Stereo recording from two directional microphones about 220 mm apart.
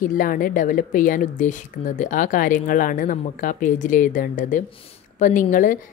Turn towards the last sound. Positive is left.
turn(degrees=35)  # may be behind; listen again after turning